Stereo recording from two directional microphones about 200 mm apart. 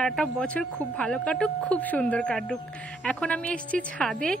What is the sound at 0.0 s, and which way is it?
Speech, 5° left (ahead or behind).